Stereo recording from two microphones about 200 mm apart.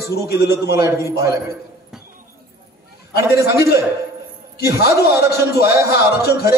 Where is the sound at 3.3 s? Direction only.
15° right (ahead or behind).